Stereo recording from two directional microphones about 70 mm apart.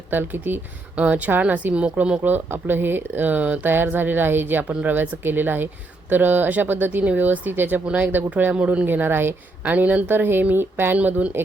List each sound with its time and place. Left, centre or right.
0.1 s speech: right
2.2 s speech: right
10.9 s speech: right